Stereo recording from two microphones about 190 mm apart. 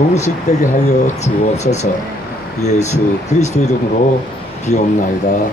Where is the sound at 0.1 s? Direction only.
35° left (ahead or behind).